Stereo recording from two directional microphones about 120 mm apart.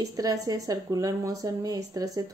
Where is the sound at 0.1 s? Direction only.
30° right (ahead or behind).